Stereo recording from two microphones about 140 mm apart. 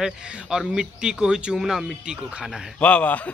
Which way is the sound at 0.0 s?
5° right (ahead or behind).